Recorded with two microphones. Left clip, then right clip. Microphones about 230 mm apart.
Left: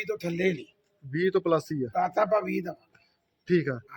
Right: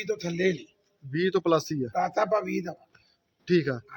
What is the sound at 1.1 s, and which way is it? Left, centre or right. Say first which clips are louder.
Speech: right 1 dB; centre.